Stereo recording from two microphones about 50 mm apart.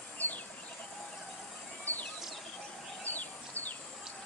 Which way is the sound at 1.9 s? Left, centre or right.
Left.